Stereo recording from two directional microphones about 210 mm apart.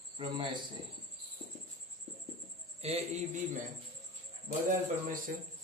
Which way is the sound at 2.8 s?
30° right (ahead or behind).